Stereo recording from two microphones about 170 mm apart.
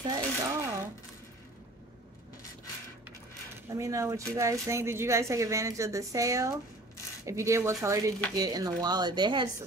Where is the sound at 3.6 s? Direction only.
15° right (ahead or behind).